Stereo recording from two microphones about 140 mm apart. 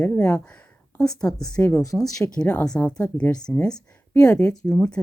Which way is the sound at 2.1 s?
25° left (ahead or behind).